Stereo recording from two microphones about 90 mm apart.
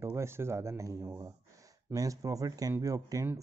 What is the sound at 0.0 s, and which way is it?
Speech, 30° right (ahead or behind).